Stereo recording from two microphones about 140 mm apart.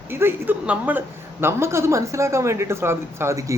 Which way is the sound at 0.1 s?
15° right (ahead or behind).